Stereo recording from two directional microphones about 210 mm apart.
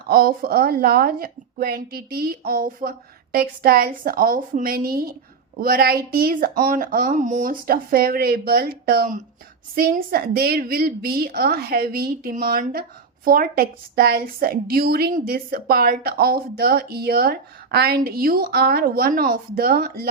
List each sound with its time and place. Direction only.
0.1 s a woman's voice: 45° right (ahead or behind)